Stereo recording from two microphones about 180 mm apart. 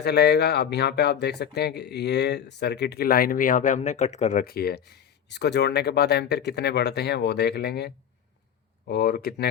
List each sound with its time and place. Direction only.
0.0 s speech: 65° left (ahead or behind); by 4.4 s 40° left (ahead or behind)
4.4 s speech: 60° left (ahead or behind)